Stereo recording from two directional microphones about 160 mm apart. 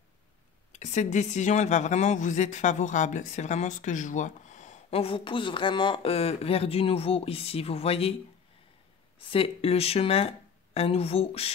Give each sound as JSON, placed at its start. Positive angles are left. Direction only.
{"t": 0.7, "sound": "speech", "side_deg": 45}
{"t": 9.3, "sound": "speech", "side_deg": 35}